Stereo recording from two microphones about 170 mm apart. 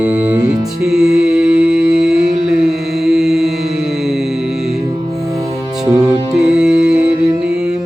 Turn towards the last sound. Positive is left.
turn(degrees=-5)  # may be behind; listen again after turning